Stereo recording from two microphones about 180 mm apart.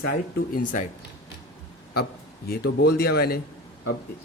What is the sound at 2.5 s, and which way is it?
Speech, 70° left (ahead or behind).